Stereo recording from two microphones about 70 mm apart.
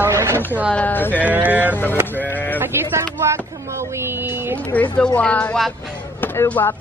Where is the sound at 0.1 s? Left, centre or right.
Right.